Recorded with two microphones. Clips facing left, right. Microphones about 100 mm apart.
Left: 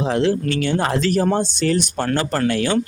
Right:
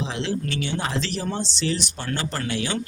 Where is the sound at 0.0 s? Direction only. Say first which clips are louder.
Left 9 dB; 50° left (ahead or behind).